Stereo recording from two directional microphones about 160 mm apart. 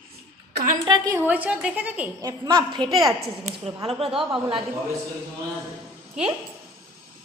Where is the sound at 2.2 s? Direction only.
25° right (ahead or behind).